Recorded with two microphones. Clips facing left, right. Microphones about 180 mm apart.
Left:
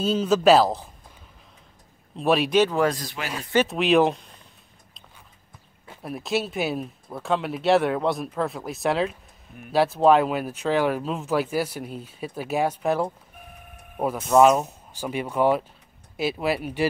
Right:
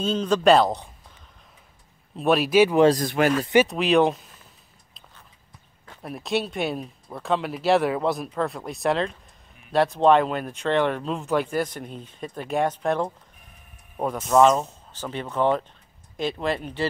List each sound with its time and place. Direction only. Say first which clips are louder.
0.0 s speech: left 1 dB; 5° left (ahead or behind)
2.1 s speech: right 2 dB; centre (ahead or behind)
3.0 s speech: right 12 dB; 50° right (ahead or behind)
3.6 s speech: even; centre (ahead or behind)
6.0 s speech: even; centre (ahead or behind)